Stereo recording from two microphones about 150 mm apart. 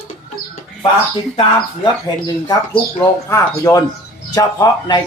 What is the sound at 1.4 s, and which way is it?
Speech, 30° left (ahead or behind).